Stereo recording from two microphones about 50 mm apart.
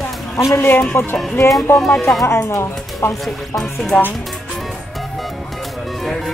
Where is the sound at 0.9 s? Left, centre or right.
Left.